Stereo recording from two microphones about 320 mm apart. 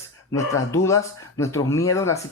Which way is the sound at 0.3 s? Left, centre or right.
Centre.